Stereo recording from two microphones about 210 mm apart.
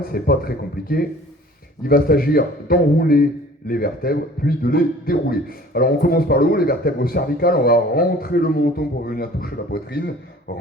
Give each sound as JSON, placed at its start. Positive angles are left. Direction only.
{"t": 0.1, "sound": "a man's voice", "side_deg": 45}